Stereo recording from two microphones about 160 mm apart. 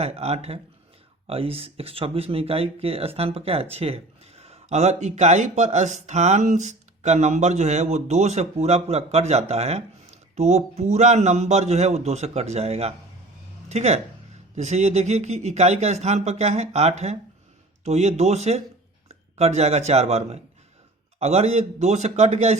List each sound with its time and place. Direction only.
0.0 s a man's voice: 40° right (ahead or behind)